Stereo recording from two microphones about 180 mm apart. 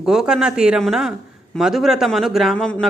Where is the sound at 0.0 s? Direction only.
5° right (ahead or behind).